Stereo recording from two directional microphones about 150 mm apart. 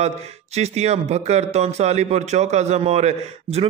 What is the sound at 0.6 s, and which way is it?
Speech, 45° right (ahead or behind).